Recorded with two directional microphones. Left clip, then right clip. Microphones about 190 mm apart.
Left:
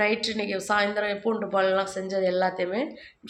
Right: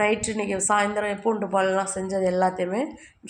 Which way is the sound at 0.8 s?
15° right (ahead or behind).